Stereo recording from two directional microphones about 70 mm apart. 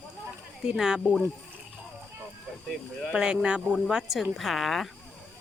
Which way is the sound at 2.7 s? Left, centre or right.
Centre.